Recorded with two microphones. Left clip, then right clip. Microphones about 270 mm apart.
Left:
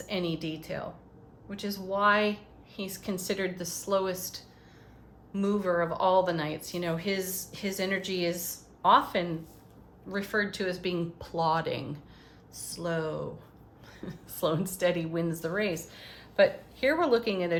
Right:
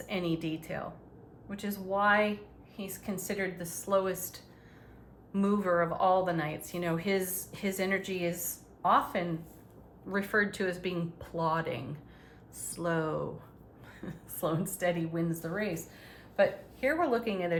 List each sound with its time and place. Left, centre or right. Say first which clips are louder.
0.1 s speech: left 1 dB; centre
8.8 s speech: left 4 dB; centre
10.1 s speech: right 1 dB; centre
14.0 s a woman's voice: left 4 dB; centre